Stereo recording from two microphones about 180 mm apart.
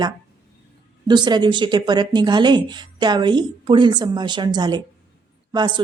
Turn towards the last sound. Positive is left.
turn(degrees=-25)  # may be behind; listen again after turning